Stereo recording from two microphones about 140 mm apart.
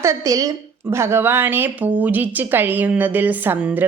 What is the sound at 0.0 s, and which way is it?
A woman's voice, 20° right (ahead or behind).